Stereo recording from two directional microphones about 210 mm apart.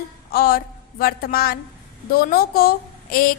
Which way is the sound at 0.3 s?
45° left (ahead or behind).